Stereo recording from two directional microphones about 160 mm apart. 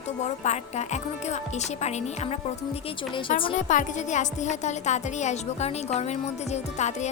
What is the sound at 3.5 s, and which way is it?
A woman's voice, 50° left (ahead or behind).